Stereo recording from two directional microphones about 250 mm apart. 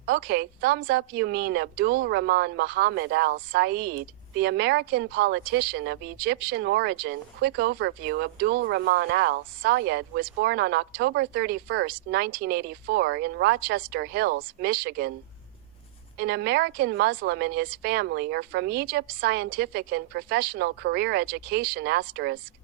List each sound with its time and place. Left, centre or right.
0.0 s speech: right
16.1 s speech: right